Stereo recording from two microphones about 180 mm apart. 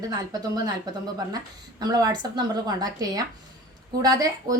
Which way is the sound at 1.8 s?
20° right (ahead or behind).